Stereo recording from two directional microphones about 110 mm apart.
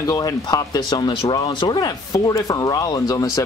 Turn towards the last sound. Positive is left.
turn(degrees=35)  # may be behind; listen again after turning